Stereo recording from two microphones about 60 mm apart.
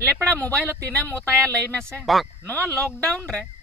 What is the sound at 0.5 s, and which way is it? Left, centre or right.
Speech, right.